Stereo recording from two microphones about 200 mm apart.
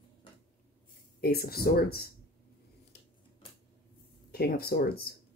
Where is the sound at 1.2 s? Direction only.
50° left (ahead or behind).